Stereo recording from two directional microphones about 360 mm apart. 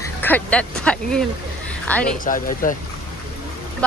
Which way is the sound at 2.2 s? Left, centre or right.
Left.